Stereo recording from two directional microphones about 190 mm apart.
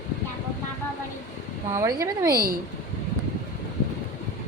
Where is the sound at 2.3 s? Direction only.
50° right (ahead or behind).